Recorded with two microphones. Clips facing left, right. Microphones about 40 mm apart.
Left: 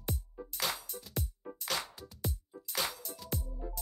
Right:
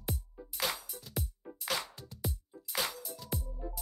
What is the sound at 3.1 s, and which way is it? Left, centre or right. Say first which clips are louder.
Music: right 1 dB; left.